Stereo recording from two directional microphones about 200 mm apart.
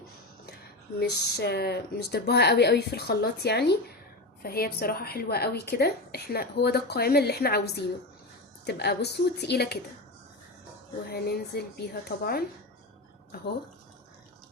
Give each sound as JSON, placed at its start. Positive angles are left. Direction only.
{"t": 0.9, "sound": "a woman's voice", "side_deg": 55}
{"t": 11.1, "sound": "a woman's voice", "side_deg": 50}